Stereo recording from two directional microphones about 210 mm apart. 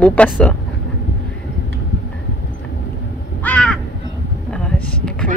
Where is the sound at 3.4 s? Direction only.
5° left (ahead or behind).